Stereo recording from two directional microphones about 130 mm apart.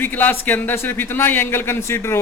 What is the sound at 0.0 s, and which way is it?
Speech, 15° left (ahead or behind).